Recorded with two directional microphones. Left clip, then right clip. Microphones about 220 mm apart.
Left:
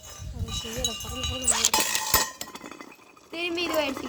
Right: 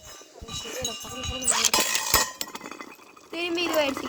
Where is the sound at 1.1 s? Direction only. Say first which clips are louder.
Left 1 dB; 55° left (ahead or behind).